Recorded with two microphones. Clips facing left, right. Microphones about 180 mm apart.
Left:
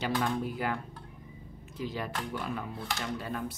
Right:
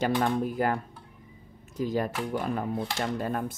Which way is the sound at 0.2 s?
45° right (ahead or behind).